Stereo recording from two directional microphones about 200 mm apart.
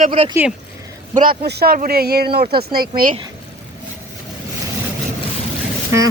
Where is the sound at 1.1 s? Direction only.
45° right (ahead or behind).